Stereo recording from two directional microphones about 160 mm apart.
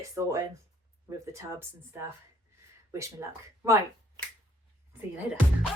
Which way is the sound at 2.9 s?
20° right (ahead or behind).